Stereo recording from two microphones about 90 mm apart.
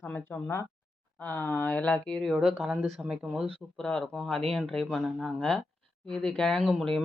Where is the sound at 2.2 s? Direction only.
5° right (ahead or behind).